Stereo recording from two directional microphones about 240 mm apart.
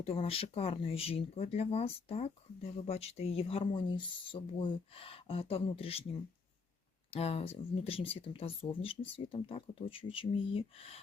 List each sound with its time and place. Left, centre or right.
0.0 s speech: left